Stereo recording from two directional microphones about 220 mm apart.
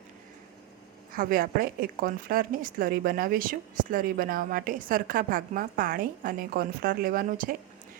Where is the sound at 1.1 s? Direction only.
40° right (ahead or behind).